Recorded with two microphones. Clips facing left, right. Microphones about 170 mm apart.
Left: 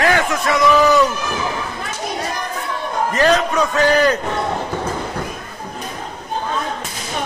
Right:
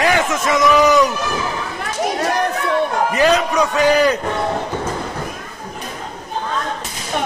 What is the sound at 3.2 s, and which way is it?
Speech, 10° right (ahead or behind).